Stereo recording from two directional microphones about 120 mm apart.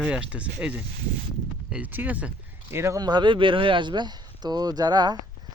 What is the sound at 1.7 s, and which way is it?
Speech, 15° right (ahead or behind).